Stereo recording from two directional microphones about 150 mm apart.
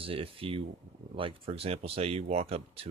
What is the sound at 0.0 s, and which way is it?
Speech, 40° right (ahead or behind).